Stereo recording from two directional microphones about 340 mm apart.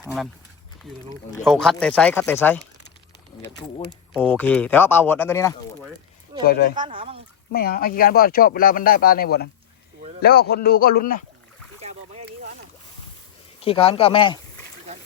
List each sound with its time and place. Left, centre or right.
1.1 s speech: centre
4.1 s speech: centre
6.4 s speech: left
6.7 s speech: centre
7.5 s speech: left
11.8 s boat: centre
13.6 s speech: centre